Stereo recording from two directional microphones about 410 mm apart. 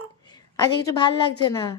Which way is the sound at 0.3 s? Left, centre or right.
Centre.